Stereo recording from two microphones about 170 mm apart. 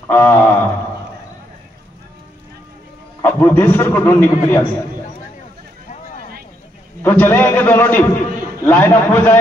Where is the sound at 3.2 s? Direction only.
15° left (ahead or behind).